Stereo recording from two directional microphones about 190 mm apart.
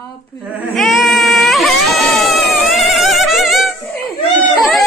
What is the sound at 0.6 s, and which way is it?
Baby cry, centre (ahead or behind).